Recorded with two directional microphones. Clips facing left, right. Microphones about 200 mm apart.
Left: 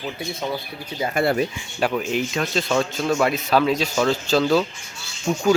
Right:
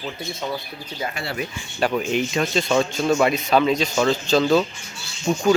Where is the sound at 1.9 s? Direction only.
5° left (ahead or behind).